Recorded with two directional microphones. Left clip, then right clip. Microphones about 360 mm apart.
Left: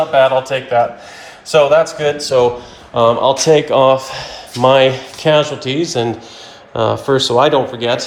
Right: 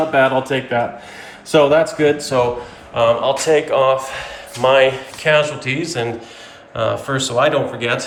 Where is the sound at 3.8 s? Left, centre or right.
Centre.